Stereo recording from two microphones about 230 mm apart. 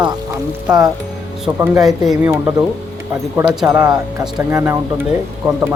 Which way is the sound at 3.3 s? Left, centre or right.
Centre.